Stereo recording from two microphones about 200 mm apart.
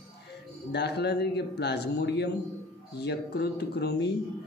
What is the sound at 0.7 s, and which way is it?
A man's voice, 55° left (ahead or behind).